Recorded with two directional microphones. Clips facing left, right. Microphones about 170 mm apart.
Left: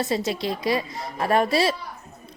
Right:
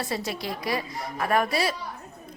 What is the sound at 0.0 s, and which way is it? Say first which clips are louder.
A woman's voice: left 6 dB; 20° left (ahead or behind).